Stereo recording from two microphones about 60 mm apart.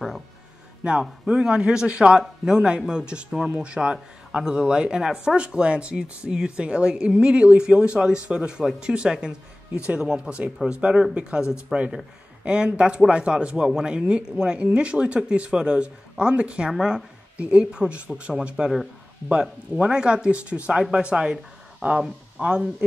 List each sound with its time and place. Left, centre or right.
1.0 s a man's voice: centre
19.8 s a man's voice: centre